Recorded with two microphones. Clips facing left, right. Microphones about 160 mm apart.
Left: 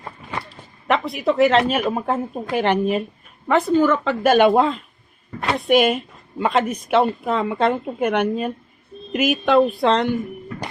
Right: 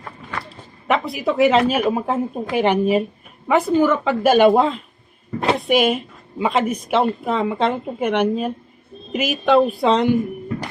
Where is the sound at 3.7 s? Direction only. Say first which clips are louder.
Right 1 dB; 15° right (ahead or behind).